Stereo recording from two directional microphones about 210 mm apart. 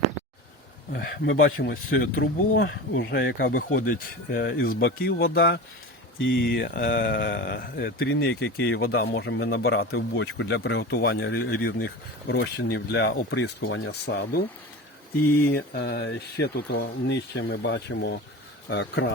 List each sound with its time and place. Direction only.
0.9 s speech: 45° left (ahead or behind)
1.3 s speech: 70° left (ahead or behind)
1.5 s speech: 45° left (ahead or behind)
2.6 s speech: 60° left (ahead or behind)
14.1 s speech: 45° left (ahead or behind)
15.4 s speech: 50° left (ahead or behind)